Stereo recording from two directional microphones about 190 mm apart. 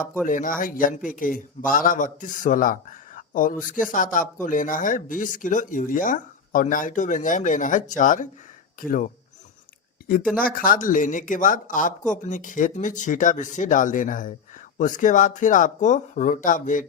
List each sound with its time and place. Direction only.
0.3 s a man's voice: 45° left (ahead or behind)
10.4 s a man's voice: 50° left (ahead or behind)